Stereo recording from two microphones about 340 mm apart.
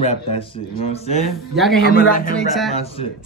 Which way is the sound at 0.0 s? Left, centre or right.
Centre.